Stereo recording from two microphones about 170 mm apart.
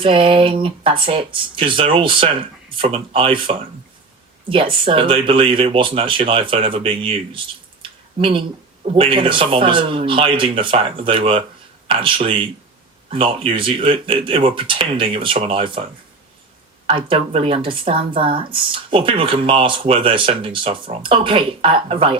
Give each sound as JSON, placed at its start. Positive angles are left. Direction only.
{"t": 0.0, "sound": "speech", "side_deg": -30}